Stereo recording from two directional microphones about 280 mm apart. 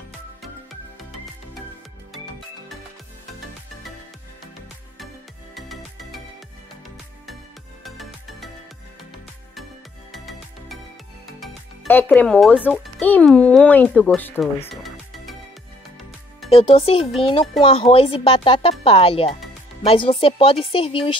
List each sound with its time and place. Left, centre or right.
5.5 s music: centre
7.8 s music: centre
10.1 s music: centre
11.3 s speech: centre
16.4 s speech: centre